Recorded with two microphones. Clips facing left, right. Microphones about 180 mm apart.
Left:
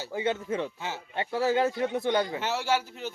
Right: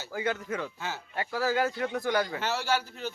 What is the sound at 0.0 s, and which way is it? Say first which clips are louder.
Speech: left 2 dB; 25° left (ahead or behind).